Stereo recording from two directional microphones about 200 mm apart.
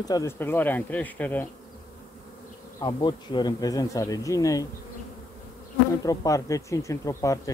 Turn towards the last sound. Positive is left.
turn(degrees=15)  # may be behind; listen again after turning